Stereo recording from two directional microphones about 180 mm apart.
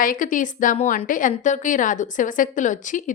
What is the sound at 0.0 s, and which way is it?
A woman's voice, 50° left (ahead or behind).